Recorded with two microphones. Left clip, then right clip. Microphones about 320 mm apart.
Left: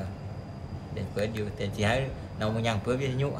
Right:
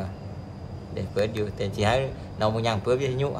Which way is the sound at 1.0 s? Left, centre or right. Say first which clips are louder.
Right 5 dB; centre.